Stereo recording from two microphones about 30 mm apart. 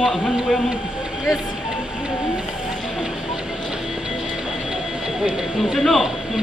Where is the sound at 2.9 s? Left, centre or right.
Centre.